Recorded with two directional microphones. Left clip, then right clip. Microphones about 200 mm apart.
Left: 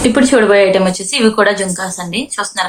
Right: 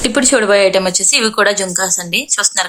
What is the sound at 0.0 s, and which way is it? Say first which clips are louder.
A woman's voice: left 3 dB; 60° right (ahead or behind).